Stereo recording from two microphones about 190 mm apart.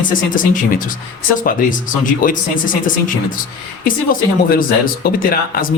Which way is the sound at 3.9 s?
50° left (ahead or behind).